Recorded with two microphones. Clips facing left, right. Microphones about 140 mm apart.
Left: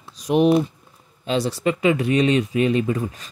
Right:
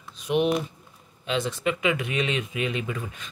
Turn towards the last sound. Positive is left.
turn(degrees=40)  # may be behind; listen again after turning